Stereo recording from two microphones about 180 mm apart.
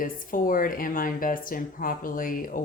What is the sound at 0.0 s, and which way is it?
Speech, 50° left (ahead or behind).